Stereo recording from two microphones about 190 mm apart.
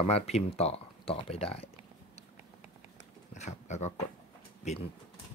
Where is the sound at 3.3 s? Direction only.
40° left (ahead or behind).